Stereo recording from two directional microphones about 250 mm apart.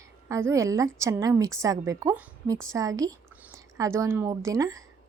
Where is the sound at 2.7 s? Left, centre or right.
Centre.